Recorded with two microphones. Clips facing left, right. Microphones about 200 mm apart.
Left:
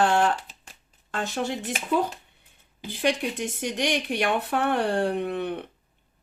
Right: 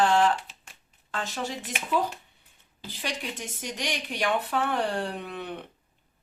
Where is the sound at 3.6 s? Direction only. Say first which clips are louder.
Left 7 dB; 60° left (ahead or behind).